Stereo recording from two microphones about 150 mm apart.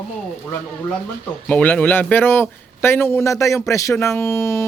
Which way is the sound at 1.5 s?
10° left (ahead or behind).